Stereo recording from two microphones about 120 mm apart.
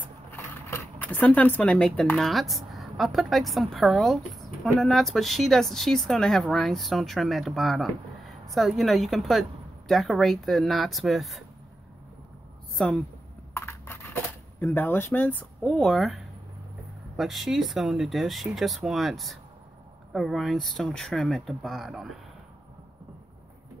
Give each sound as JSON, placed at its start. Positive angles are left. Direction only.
{"t": 0.7, "sound": "speech", "side_deg": 20}
{"t": 12.7, "sound": "a woman's voice", "side_deg": 5}
{"t": 13.5, "sound": "a sound", "side_deg": 20}
{"t": 17.2, "sound": "speech", "side_deg": 0}